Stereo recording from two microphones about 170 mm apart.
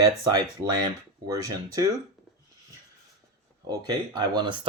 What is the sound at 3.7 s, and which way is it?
Speech, 25° right (ahead or behind).